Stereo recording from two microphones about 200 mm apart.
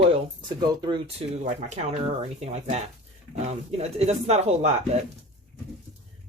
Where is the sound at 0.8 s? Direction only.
25° right (ahead or behind).